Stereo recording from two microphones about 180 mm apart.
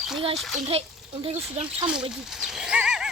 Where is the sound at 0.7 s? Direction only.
30° right (ahead or behind).